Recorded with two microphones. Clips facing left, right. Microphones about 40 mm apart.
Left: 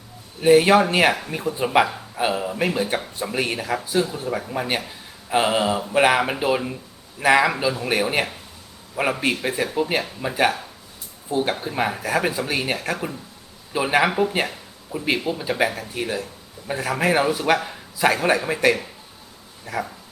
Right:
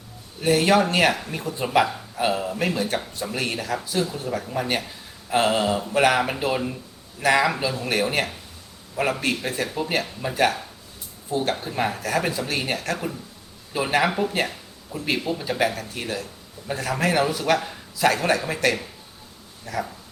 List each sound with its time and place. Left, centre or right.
0.4 s speech: centre